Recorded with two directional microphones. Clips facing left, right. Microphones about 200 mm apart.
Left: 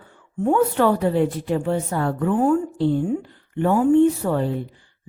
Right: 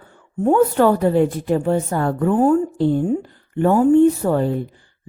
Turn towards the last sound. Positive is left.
turn(degrees=-45)  # may be behind; listen again after turning